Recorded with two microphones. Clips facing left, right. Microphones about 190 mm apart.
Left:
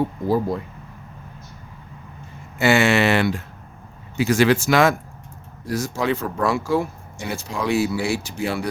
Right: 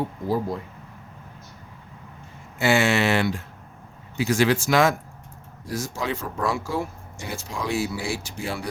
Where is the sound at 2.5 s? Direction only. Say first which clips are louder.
Left 3 dB; 65° left (ahead or behind).